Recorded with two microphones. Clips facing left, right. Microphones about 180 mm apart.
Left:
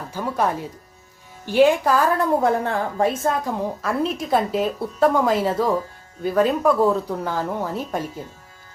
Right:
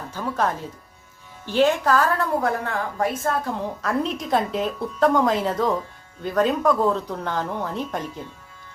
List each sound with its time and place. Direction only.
0.1 s a woman's voice: 10° left (ahead or behind)
3.8 s a woman's voice: 5° left (ahead or behind)